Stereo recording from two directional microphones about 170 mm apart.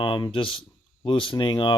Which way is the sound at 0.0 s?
30° left (ahead or behind).